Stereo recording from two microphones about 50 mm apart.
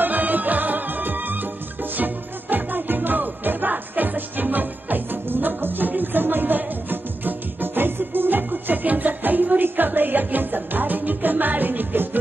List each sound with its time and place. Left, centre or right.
0.0 s music: right